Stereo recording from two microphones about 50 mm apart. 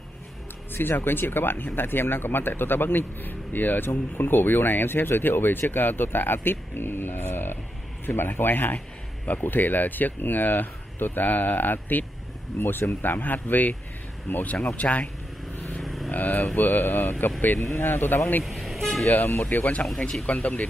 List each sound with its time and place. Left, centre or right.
0.7 s speech: left
8.7 s speech: left
15.8 s vehicle: centre
16.1 s speech: left
17.6 s speech: left
17.8 s speech: left
18.4 s toot: centre
19.0 s speech: left